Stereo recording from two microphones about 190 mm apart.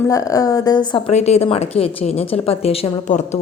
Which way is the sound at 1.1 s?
35° left (ahead or behind).